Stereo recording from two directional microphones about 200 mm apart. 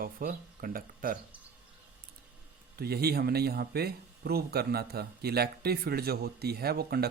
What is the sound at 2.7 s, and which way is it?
Speech, 50° right (ahead or behind).